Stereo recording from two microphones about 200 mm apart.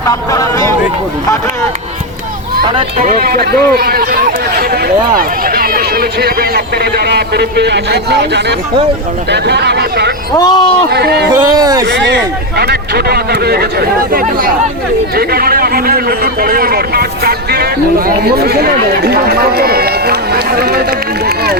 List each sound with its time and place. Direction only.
0.1 s speech: 15° left (ahead or behind)
3.0 s speech: 45° right (ahead or behind)
10.3 s speech: 20° left (ahead or behind)
10.9 s speech: 55° right (ahead or behind)
11.4 s speech: 20° right (ahead or behind)
12.0 s speech: 55° right (ahead or behind)